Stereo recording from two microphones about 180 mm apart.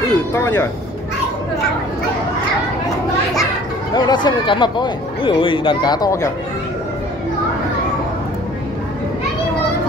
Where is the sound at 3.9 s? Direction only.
25° left (ahead or behind).